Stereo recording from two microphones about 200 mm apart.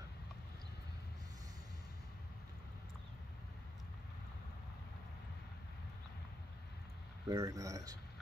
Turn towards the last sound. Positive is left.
turn(degrees=-15)  # may be behind; listen again after turning